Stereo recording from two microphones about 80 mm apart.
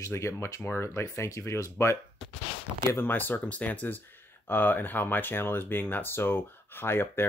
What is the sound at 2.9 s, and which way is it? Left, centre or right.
Speech, left.